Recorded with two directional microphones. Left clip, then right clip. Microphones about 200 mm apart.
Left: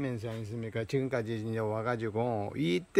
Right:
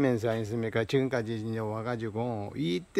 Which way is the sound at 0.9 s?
Centre (ahead or behind).